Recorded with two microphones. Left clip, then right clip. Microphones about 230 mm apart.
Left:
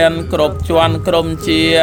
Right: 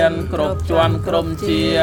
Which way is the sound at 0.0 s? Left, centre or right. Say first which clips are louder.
Left 4 dB; left.